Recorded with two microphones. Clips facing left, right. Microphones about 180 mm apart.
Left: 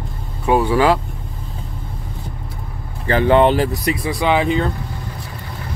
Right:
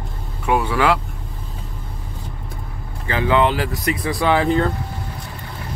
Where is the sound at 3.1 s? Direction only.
45° left (ahead or behind).